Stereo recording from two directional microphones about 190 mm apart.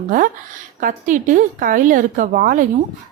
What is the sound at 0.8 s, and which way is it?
A woman's voice, 45° right (ahead or behind).